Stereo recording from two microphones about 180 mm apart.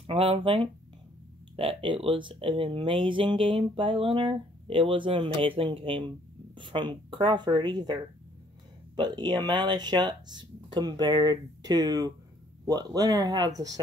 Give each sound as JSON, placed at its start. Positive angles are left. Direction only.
{"t": 0.0, "sound": "speech", "side_deg": -30}